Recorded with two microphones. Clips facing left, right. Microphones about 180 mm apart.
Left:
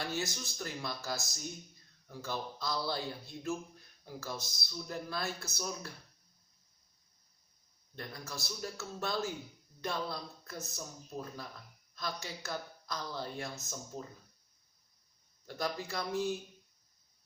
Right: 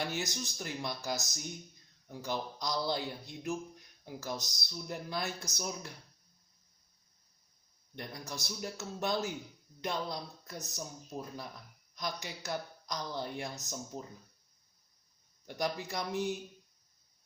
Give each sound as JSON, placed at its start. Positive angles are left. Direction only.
{"t": 0.1, "sound": "speech", "side_deg": -20}
{"t": 7.9, "sound": "speech", "side_deg": -20}
{"t": 11.9, "sound": "speech", "side_deg": -15}
{"t": 15.4, "sound": "speech", "side_deg": -15}